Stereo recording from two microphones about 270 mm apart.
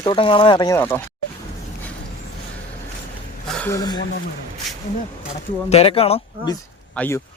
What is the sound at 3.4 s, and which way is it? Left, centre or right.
Speech, centre.